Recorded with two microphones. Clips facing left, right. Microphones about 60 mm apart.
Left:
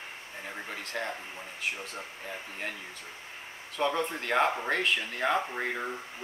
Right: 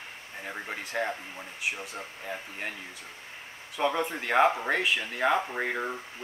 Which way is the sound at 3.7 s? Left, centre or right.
Centre.